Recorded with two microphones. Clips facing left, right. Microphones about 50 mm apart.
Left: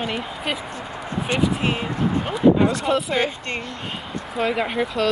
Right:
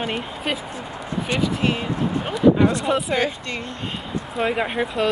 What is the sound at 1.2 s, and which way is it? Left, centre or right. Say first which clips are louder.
Speech: left 1 dB; left.